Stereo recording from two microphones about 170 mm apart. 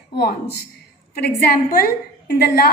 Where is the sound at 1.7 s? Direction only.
65° left (ahead or behind).